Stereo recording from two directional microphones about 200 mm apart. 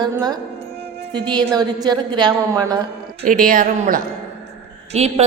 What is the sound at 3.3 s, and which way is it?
Speech, 45° right (ahead or behind).